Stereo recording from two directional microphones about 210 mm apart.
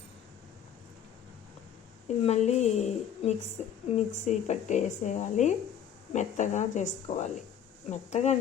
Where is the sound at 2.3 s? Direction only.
30° left (ahead or behind).